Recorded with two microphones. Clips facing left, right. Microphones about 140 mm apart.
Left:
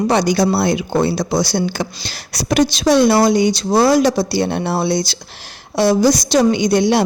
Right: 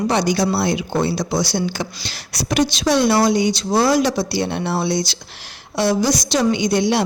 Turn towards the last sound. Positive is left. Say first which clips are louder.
# left 3 dB
turn(degrees=40)  # may be behind; listen again after turning